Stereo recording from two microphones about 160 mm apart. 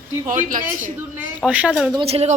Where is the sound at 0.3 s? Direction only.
55° right (ahead or behind).